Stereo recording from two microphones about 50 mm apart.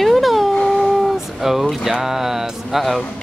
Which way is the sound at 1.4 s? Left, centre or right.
Centre.